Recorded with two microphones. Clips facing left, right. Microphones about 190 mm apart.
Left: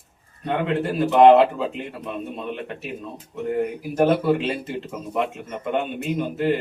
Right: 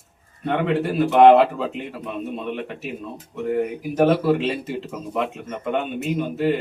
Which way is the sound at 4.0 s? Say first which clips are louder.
Right 1 dB; centre (ahead or behind).